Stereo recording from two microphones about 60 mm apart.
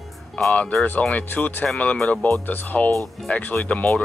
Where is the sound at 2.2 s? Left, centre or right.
Left.